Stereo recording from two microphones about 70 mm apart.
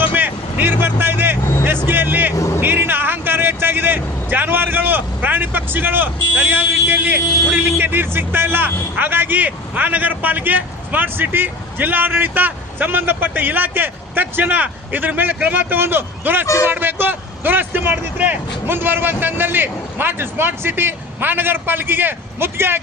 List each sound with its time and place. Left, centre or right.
0.1 s vehicle: right
6.5 s speech: right